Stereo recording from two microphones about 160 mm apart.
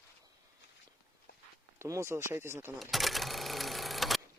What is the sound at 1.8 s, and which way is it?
Speech, 15° right (ahead or behind).